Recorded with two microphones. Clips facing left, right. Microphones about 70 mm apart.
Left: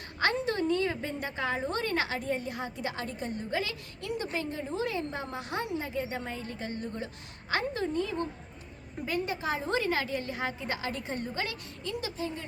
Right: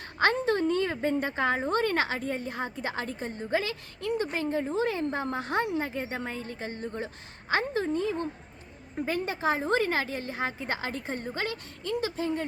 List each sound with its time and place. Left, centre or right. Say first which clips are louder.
0.2 s a woman's voice: right 4 dB; right